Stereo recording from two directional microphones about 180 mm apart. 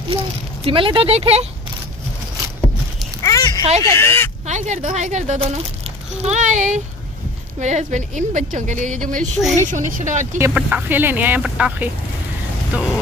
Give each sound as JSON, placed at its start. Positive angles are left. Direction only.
{"t": 0.7, "sound": "speech", "side_deg": -30}
{"t": 3.2, "sound": "a sound", "side_deg": 20}
{"t": 3.8, "sound": "speech", "side_deg": 15}
{"t": 4.5, "sound": "a woman's voice", "side_deg": -40}
{"t": 10.4, "sound": "speech", "side_deg": -10}
{"t": 12.7, "sound": "music", "side_deg": -5}